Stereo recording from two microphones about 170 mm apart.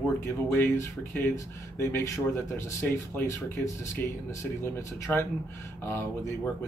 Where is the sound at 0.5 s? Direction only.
15° left (ahead or behind).